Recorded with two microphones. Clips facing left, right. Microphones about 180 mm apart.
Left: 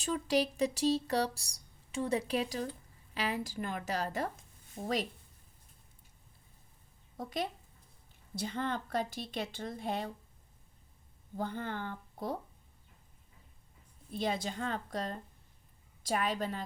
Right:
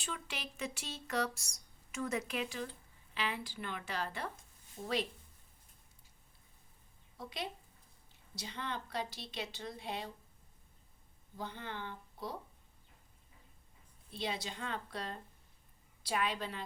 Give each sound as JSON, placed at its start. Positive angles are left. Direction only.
{"t": 0.0, "sound": "speech", "side_deg": 40}
{"t": 7.2, "sound": "a woman's voice", "side_deg": 45}
{"t": 11.3, "sound": "a woman's voice", "side_deg": 50}
{"t": 14.1, "sound": "a woman's voice", "side_deg": 50}